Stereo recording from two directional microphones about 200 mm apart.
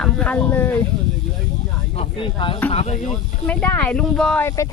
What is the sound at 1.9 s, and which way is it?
Speech, 25° left (ahead or behind).